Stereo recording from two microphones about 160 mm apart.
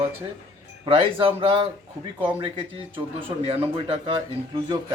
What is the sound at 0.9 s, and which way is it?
Speech, 35° right (ahead or behind).